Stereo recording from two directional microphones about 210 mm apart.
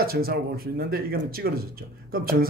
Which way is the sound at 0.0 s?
45° right (ahead or behind).